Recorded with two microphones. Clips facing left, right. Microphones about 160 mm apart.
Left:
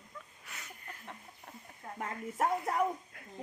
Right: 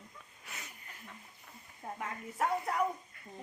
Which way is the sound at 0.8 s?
50° left (ahead or behind).